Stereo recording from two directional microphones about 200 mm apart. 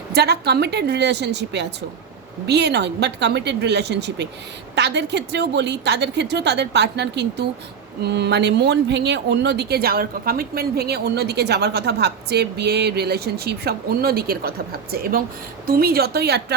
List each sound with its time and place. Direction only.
0.1 s a woman's voice: 55° right (ahead or behind)